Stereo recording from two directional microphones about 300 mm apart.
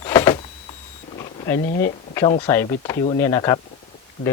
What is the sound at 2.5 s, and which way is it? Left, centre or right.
Speech, centre.